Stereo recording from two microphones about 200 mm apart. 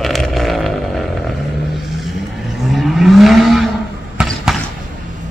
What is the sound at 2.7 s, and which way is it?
Vehicle, centre (ahead or behind).